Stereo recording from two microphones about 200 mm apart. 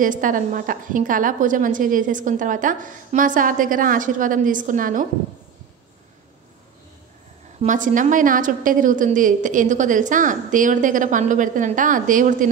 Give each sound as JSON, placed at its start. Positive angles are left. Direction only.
{"t": 0.0, "sound": "a woman's voice", "side_deg": -40}
{"t": 7.6, "sound": "a woman's voice", "side_deg": -40}